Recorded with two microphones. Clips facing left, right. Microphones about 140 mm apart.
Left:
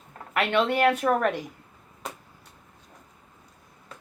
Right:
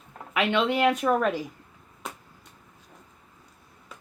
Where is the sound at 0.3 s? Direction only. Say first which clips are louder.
Left 1 dB; centre (ahead or behind).